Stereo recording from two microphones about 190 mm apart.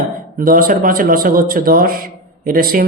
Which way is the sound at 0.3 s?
50° right (ahead or behind).